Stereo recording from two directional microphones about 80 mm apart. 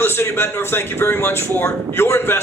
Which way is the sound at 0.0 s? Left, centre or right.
Left.